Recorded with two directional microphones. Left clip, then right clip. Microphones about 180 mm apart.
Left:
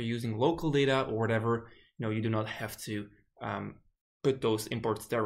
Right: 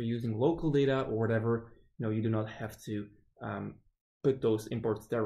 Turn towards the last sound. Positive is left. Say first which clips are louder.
# left 1 dB
turn(degrees=10)  # may be behind; listen again after turning